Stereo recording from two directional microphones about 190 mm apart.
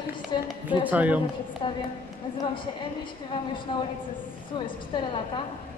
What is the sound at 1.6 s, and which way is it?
Speech, 25° left (ahead or behind).